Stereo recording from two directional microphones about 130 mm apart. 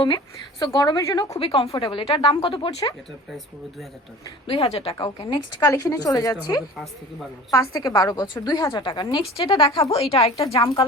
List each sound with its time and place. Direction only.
0.6 s a woman's voice: 35° left (ahead or behind)
1.4 s speech: 45° left (ahead or behind)
4.4 s speech: 45° left (ahead or behind)
4.9 s a woman's voice: 30° left (ahead or behind); by 10.5 s 50° left (ahead or behind)